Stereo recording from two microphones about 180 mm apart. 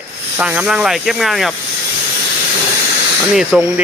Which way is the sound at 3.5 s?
5° right (ahead or behind).